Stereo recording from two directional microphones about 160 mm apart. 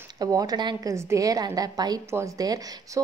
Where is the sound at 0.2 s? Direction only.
25° right (ahead or behind).